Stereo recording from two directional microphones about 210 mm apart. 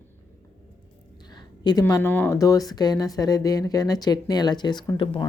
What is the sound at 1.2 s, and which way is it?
Speech, 20° left (ahead or behind).